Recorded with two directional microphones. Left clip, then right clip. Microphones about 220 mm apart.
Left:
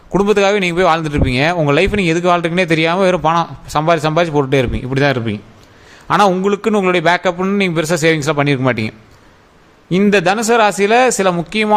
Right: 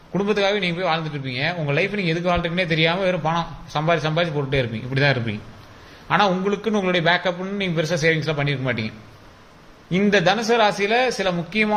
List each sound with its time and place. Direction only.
0.1 s a man's voice: 50° left (ahead or behind)
9.9 s a man's voice: 45° left (ahead or behind)